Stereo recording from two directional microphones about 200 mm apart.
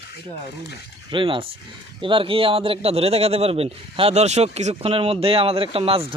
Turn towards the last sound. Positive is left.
turn(degrees=-25)  # may be behind; listen again after turning